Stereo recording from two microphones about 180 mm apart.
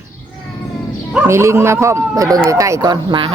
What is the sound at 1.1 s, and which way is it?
Speech, 15° right (ahead or behind).